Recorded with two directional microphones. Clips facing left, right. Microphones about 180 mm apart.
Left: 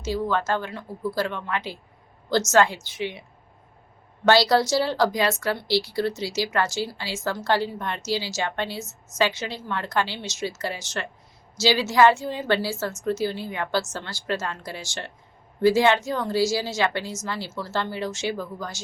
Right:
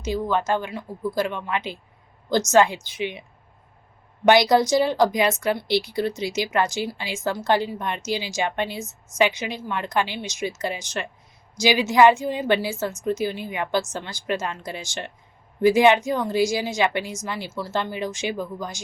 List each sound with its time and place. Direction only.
0.0 s speech: 15° right (ahead or behind)
4.3 s speech: 15° right (ahead or behind)